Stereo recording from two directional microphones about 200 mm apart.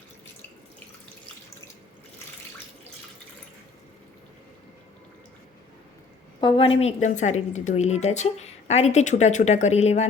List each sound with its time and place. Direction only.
6.4 s a woman's voice: 25° left (ahead or behind)